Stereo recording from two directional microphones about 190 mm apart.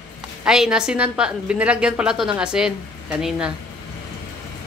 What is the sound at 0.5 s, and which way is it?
A woman's voice, 5° right (ahead or behind).